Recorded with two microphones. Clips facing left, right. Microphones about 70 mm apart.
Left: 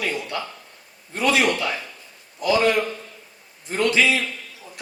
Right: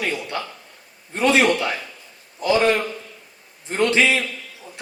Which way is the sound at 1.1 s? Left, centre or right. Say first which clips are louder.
Right 3 dB; right.